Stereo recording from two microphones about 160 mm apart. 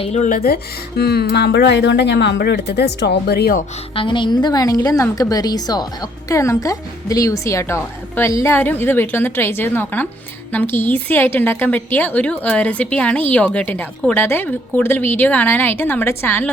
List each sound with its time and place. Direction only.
0.0 s speech: 45° left (ahead or behind)
0.3 s speech: 70° left (ahead or behind)
3.9 s a woman's voice: 30° left (ahead or behind); by 16.5 s 15° left (ahead or behind)